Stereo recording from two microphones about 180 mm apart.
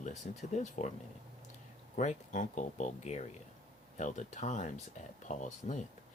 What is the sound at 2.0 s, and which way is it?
Speech, 40° left (ahead or behind).